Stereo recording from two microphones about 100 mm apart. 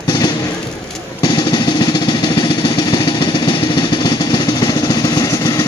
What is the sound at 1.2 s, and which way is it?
Drum, 45° left (ahead or behind).